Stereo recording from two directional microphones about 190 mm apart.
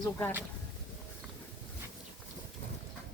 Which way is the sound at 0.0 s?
15° left (ahead or behind).